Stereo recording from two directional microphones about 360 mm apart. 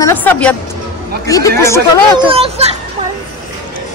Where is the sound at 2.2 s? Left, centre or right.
Centre.